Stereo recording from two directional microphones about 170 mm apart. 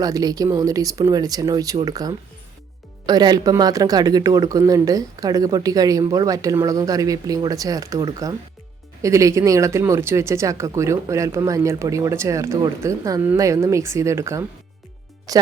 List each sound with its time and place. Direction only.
0.0 s speech: 20° right (ahead or behind)